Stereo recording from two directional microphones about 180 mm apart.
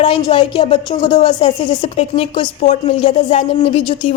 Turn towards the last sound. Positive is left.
turn(degrees=30)  # may be behind; listen again after turning